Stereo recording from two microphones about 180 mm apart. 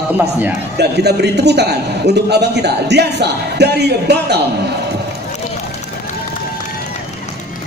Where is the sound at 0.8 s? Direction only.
65° right (ahead or behind).